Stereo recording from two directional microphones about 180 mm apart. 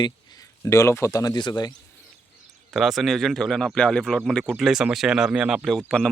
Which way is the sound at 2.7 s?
Centre (ahead or behind).